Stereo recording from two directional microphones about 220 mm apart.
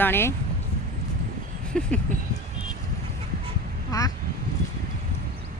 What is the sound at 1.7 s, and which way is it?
Vehicle, 5° left (ahead or behind).